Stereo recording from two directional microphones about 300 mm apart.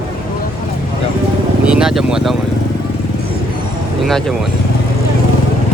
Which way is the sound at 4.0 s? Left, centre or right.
Centre.